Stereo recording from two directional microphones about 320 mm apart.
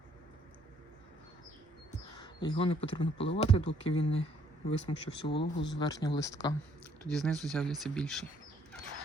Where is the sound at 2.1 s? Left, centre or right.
Centre.